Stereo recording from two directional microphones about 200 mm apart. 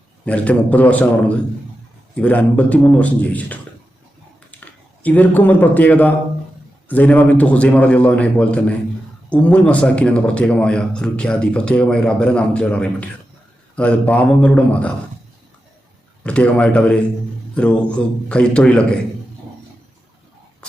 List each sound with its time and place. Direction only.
0.3 s a man's voice: 5° left (ahead or behind)
4.6 s a man's voice: 10° left (ahead or behind)
16.2 s a man's voice: 5° left (ahead or behind)